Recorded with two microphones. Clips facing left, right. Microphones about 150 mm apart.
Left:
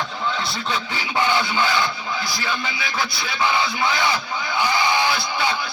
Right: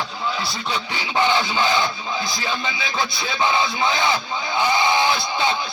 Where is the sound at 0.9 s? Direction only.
20° right (ahead or behind).